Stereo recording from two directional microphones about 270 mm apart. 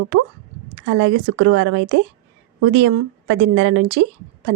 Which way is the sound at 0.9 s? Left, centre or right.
Right.